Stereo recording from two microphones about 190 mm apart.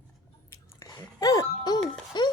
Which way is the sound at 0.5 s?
15° left (ahead or behind).